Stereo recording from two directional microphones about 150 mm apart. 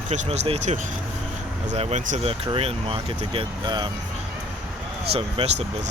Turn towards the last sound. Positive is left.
turn(degrees=-40)  # may be behind; listen again after turning